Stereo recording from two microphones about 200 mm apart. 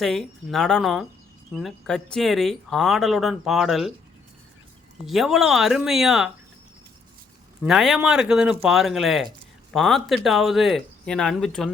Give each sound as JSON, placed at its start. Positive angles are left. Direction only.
{"t": 0.0, "sound": "speech", "side_deg": 0}
{"t": 5.0, "sound": "speech", "side_deg": 0}
{"t": 7.6, "sound": "speech", "side_deg": 0}